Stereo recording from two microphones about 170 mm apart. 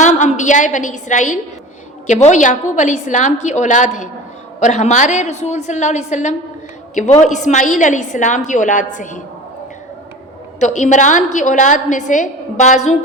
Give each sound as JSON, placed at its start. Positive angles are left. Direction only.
{"t": 0.0, "sound": "a woman's voice", "side_deg": 45}
{"t": 10.6, "sound": "a woman's voice", "side_deg": 45}